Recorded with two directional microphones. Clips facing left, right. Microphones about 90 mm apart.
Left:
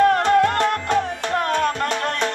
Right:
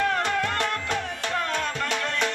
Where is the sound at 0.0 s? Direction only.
50° left (ahead or behind).